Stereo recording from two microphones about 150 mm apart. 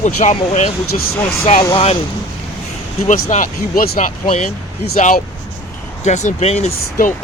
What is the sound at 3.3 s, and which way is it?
Speech, 60° left (ahead or behind).